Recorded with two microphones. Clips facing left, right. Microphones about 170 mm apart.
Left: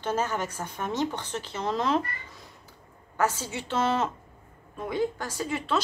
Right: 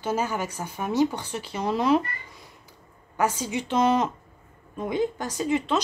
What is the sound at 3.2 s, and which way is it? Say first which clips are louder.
Speech: right 2 dB; 15° right (ahead or behind).